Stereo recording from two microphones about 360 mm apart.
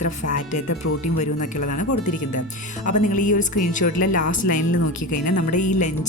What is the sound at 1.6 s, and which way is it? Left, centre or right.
Speech, left.